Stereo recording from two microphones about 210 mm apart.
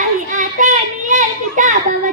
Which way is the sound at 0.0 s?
35° right (ahead or behind).